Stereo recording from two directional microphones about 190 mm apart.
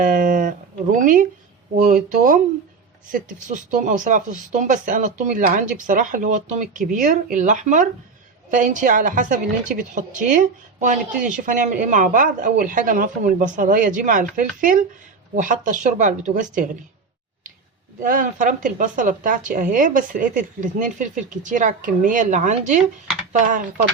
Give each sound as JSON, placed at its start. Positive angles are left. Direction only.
{"t": 0.0, "sound": "a woman's voice", "side_deg": -45}
{"t": 18.0, "sound": "a woman's voice", "side_deg": -45}